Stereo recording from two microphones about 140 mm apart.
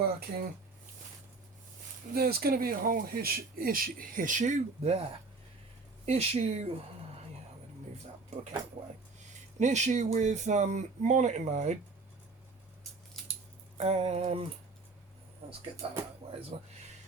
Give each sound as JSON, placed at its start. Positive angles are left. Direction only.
{"t": 0.2, "sound": "speech", "side_deg": -90}
{"t": 2.1, "sound": "speech", "side_deg": -90}
{"t": 6.1, "sound": "music", "side_deg": -50}
{"t": 9.6, "sound": "speech", "side_deg": -55}
{"t": 13.2, "sound": "dog", "side_deg": 5}
{"t": 13.7, "sound": "music", "side_deg": -45}
{"t": 15.8, "sound": "speech", "side_deg": -40}
{"t": 16.5, "sound": "music", "side_deg": -45}